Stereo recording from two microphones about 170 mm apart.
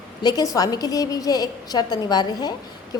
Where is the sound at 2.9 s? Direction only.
20° left (ahead or behind).